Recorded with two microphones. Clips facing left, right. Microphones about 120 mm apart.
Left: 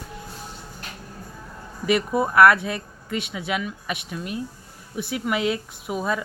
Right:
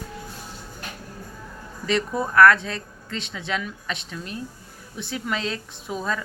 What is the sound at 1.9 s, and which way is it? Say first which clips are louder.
Speech: left 3 dB; 10° left (ahead or behind).